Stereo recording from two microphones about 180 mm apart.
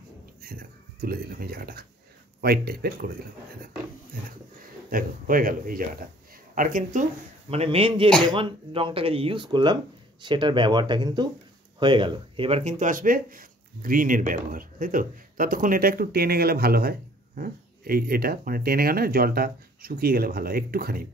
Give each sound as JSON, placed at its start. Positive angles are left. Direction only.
{"t": 0.4, "sound": "speech", "side_deg": -55}
{"t": 4.8, "sound": "speech", "side_deg": -50}
{"t": 7.4, "sound": "a man's voice", "side_deg": -35}